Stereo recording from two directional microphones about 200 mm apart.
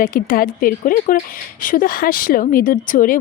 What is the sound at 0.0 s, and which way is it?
Speech, 45° left (ahead or behind).